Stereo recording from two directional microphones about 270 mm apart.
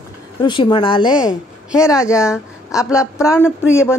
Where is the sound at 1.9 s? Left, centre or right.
Centre.